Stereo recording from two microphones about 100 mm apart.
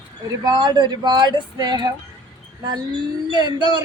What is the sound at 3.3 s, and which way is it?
Speech, 45° right (ahead or behind).